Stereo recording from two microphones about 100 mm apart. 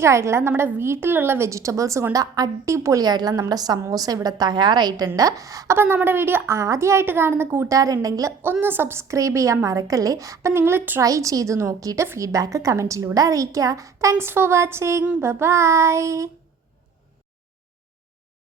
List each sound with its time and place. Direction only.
0.0 s a woman's voice: 30° right (ahead or behind)
5.7 s a woman's voice: 25° right (ahead or behind)
8.6 s a woman's voice: 20° right (ahead or behind)
11.0 s a woman's voice: 35° right (ahead or behind)